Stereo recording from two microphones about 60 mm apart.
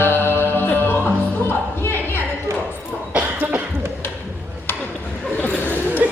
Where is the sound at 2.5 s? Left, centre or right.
Right.